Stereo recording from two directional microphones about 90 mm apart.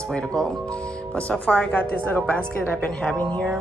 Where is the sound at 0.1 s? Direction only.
10° left (ahead or behind).